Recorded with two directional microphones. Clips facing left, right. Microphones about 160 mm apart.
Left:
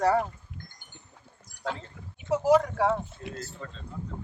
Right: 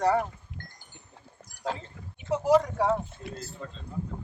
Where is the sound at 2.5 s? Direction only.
Centre (ahead or behind).